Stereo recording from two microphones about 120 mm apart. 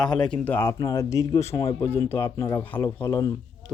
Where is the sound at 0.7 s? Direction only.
30° left (ahead or behind).